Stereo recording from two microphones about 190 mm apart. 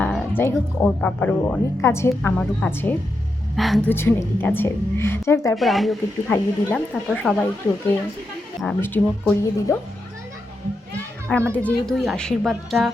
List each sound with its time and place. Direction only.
0.0 s speech: 5° left (ahead or behind)
3.5 s speech: centre (ahead or behind)
3.8 s speech: 10° left (ahead or behind)
5.5 s speech: centre (ahead or behind)
8.6 s speech: 10° left (ahead or behind)
11.5 s speech: 5° left (ahead or behind)